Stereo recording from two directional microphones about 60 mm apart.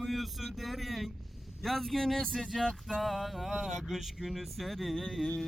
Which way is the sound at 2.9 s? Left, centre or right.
Centre.